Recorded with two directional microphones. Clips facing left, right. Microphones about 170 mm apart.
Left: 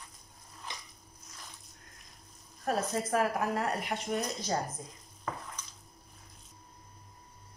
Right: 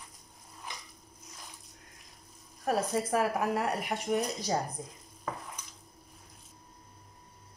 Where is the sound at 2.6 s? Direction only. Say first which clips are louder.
Right 2 dB; 10° right (ahead or behind).